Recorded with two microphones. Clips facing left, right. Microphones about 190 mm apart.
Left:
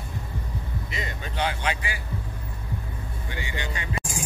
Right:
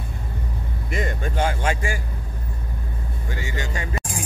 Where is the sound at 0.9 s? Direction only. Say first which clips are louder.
Right 8 dB; 50° right (ahead or behind).